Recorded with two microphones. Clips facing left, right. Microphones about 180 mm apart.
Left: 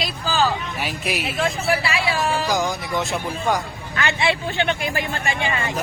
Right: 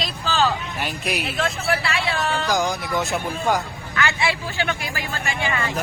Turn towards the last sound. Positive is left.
turn(degrees=20)  # may be behind; listen again after turning